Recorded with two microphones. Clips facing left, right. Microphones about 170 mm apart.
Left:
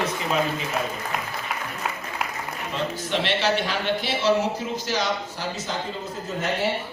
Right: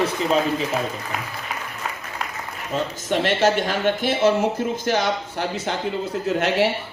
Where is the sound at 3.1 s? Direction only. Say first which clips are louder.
Right 5 dB; 45° right (ahead or behind).